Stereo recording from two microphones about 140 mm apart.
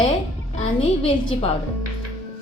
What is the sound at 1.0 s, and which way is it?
Speech, 40° left (ahead or behind).